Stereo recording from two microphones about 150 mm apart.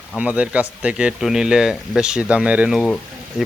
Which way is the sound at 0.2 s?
10° right (ahead or behind).